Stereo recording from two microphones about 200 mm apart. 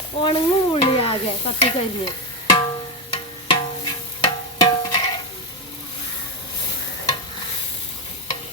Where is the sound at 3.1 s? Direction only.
25° left (ahead or behind).